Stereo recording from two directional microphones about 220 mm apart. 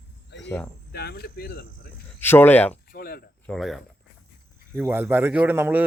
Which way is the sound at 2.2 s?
10° left (ahead or behind).